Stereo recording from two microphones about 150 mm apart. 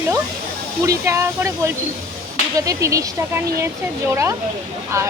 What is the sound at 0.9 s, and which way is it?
Speech, 20° right (ahead or behind).